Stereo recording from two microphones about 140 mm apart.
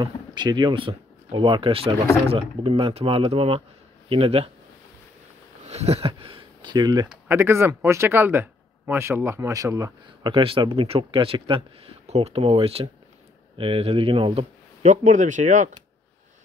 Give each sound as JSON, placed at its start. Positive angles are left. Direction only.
{"t": 0.0, "sound": "speech", "side_deg": -30}
{"t": 5.7, "sound": "speech", "side_deg": -50}
{"t": 7.1, "sound": "speech", "side_deg": -15}
{"t": 10.2, "sound": "speech", "side_deg": -40}
{"t": 14.9, "sound": "speech", "side_deg": -60}